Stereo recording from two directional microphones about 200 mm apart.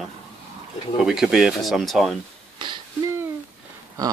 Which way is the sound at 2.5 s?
25° right (ahead or behind).